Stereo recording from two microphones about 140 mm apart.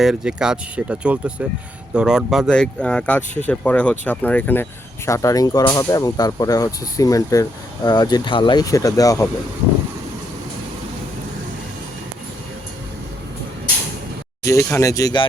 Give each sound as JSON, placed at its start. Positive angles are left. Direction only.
{"t": 0.0, "sound": "speech", "side_deg": -5}
{"t": 2.5, "sound": "speech", "side_deg": 5}
{"t": 14.4, "sound": "speech", "side_deg": 20}